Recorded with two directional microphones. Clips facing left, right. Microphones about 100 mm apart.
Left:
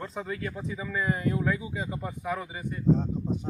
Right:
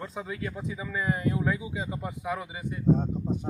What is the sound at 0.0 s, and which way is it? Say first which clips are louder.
Speech: left 1 dB; 5° right (ahead or behind).